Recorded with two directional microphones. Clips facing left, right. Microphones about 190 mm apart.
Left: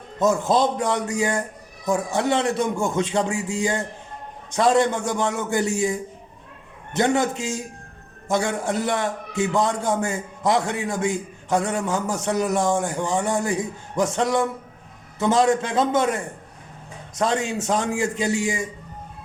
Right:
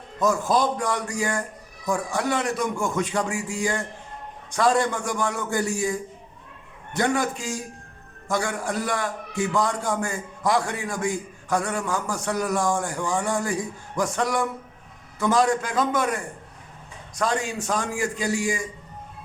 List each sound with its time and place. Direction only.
0.2 s a man's voice: 25° left (ahead or behind)